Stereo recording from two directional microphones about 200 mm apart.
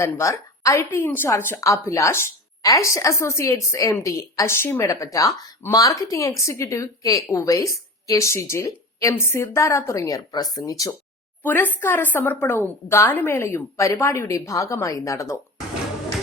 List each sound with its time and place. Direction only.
0.0 s a woman's voice: 15° left (ahead or behind)